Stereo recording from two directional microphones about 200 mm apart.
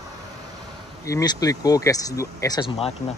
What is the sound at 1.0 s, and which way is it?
Speech, 15° left (ahead or behind).